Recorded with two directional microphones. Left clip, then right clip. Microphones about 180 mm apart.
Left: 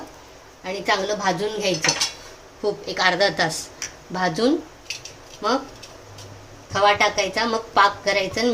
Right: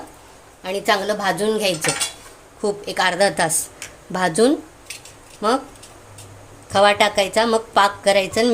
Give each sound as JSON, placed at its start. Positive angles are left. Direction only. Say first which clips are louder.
{"t": 0.6, "sound": "a woman's voice", "louder": "right 3 dB", "side_deg": -45}
{"t": 2.6, "sound": "a woman's voice", "louder": "right 2 dB", "side_deg": -35}
{"t": 6.7, "sound": "a woman's voice", "louder": "right 3 dB", "side_deg": -45}